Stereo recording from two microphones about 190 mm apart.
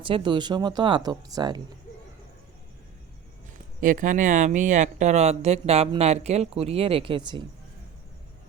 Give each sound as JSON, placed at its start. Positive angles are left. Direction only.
{"t": 0.0, "sound": "speech", "side_deg": -25}
{"t": 3.8, "sound": "speech", "side_deg": -45}